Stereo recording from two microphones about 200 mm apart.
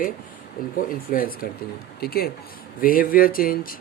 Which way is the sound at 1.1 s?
45° left (ahead or behind).